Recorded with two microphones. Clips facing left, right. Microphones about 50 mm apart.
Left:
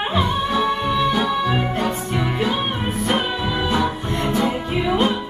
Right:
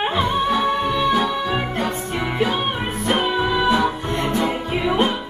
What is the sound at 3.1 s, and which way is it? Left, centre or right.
Music, centre.